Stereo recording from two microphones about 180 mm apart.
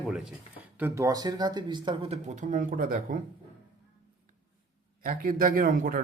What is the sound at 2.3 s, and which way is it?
Speech, 45° right (ahead or behind).